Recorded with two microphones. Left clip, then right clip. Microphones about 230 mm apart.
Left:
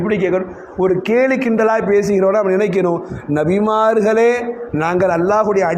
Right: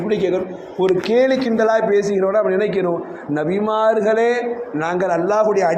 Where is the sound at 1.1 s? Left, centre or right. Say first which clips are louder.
Left 1 dB; left.